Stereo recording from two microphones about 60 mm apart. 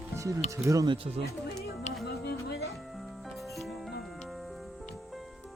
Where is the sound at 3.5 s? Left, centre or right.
Centre.